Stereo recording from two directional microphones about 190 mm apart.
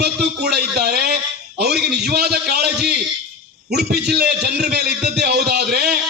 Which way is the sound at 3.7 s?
60° right (ahead or behind).